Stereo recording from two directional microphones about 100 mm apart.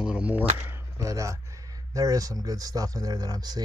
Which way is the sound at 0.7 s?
25° right (ahead or behind).